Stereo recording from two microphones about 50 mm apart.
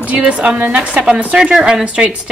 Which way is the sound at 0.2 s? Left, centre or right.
Right.